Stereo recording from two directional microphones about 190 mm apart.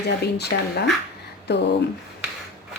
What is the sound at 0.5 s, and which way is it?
Speech, 55° left (ahead or behind).